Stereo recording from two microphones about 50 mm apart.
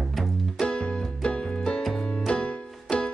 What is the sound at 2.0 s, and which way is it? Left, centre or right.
Music, centre.